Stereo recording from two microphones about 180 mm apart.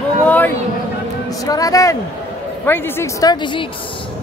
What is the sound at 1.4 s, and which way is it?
Speech, 20° left (ahead or behind).